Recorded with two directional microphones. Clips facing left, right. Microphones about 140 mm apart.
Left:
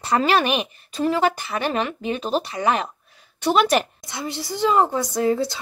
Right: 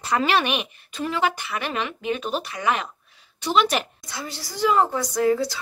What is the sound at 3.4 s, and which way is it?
Speech, 45° left (ahead or behind).